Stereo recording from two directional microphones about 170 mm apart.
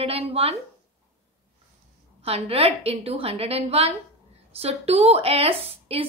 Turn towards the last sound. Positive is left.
turn(degrees=-35)  # may be behind; listen again after turning